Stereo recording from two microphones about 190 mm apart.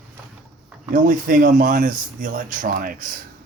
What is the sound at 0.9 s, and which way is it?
Speech, 45° right (ahead or behind).